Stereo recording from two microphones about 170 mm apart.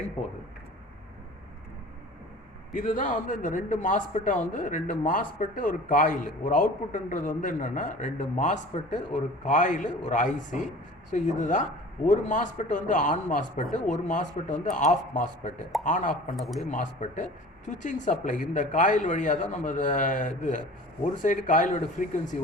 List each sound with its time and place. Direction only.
2.7 s a man's voice: 50° left (ahead or behind)
16.3 s a man's voice: centre (ahead or behind)
16.6 s a man's voice: 45° left (ahead or behind)